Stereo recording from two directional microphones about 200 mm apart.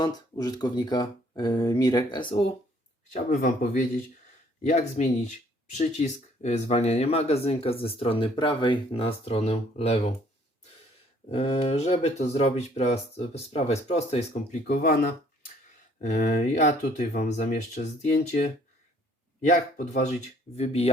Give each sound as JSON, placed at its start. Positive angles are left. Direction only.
{"t": 0.0, "sound": "speech", "side_deg": 20}
{"t": 3.2, "sound": "speech", "side_deg": 40}
{"t": 11.3, "sound": "speech", "side_deg": 30}
{"t": 14.7, "sound": "speech", "side_deg": 50}